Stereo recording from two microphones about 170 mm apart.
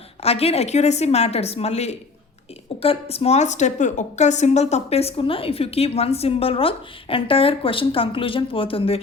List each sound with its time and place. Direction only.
0.2 s a woman's voice: 35° left (ahead or behind)